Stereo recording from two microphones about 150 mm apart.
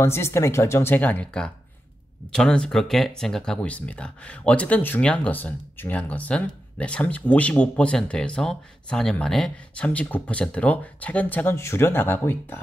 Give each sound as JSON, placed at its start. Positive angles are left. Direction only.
{"t": 0.0, "sound": "speech", "side_deg": 15}